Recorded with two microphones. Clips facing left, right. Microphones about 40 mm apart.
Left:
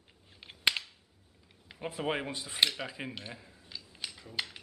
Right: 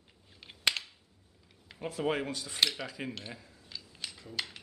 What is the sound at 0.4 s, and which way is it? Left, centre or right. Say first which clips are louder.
Cap gun: left 1 dB; centre.